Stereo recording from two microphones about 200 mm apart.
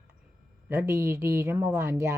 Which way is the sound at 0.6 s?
10° right (ahead or behind).